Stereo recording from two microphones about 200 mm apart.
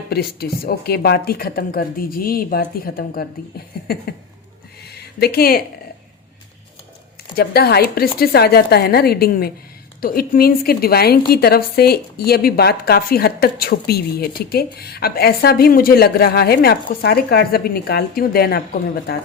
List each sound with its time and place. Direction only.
0.1 s a woman's voice: 50° left (ahead or behind)
7.3 s a woman's voice: 50° left (ahead or behind)